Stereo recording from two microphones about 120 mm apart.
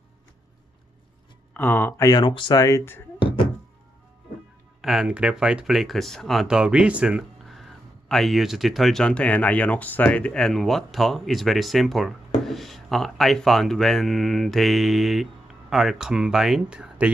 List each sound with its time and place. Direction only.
1.5 s speech: 15° left (ahead or behind)
2.0 s speech: 40° left (ahead or behind)
2.6 s speech: 25° left (ahead or behind)
3.2 s a sound: 45° left (ahead or behind)
4.8 s speech: 5° right (ahead or behind)